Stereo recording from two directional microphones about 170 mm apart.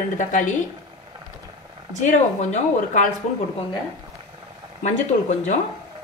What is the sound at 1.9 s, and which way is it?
A woman's voice, 45° left (ahead or behind).